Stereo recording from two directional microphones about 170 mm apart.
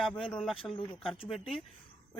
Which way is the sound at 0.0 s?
5° left (ahead or behind).